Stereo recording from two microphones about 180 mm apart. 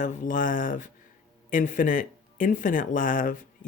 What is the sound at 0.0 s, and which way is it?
Speech, 45° left (ahead or behind).